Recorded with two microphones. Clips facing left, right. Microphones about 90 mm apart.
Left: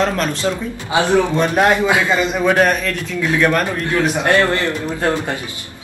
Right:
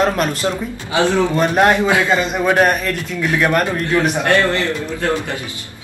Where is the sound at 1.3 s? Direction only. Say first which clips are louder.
Right 1 dB; 5° right (ahead or behind).